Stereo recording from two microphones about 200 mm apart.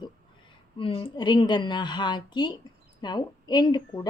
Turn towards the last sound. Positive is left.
turn(degrees=20)  # may be behind; listen again after turning